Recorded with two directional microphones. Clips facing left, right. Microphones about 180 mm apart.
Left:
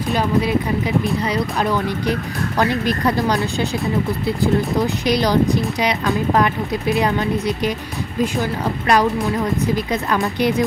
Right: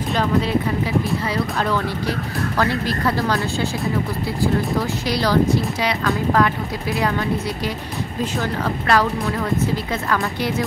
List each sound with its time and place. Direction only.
0.1 s speech: 10° left (ahead or behind)
5.0 s speech: 20° left (ahead or behind)
10.0 s speech: 20° left (ahead or behind)